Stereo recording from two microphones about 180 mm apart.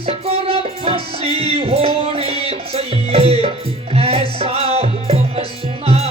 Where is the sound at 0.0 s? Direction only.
30° right (ahead or behind).